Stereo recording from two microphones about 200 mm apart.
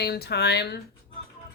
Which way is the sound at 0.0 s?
55° left (ahead or behind).